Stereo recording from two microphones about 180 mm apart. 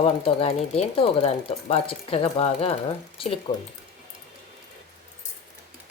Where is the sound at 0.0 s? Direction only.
30° left (ahead or behind).